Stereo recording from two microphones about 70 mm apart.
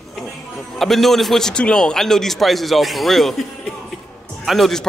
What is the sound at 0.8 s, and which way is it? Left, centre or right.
A man's voice, centre.